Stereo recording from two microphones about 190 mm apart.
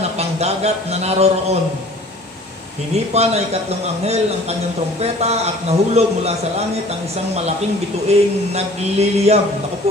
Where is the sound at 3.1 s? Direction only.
35° right (ahead or behind).